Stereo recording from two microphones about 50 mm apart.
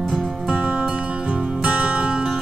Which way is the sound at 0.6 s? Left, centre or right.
Right.